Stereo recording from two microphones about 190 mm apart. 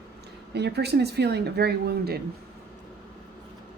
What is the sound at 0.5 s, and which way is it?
Speech, 60° right (ahead or behind).